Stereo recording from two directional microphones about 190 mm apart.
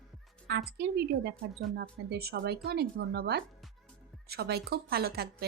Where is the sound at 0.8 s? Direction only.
60° right (ahead or behind).